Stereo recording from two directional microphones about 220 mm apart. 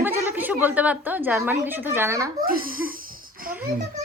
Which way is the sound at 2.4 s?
40° right (ahead or behind).